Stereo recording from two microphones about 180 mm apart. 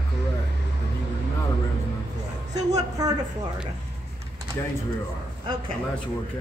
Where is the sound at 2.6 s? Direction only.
20° right (ahead or behind).